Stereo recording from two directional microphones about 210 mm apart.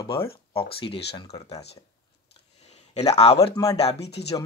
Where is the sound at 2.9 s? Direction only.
30° left (ahead or behind).